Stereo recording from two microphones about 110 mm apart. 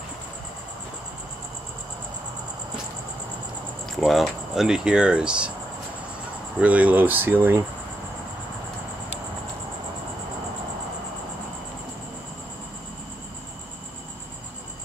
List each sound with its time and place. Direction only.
3.9 s speech: centre (ahead or behind)
6.6 s speech: 15° right (ahead or behind)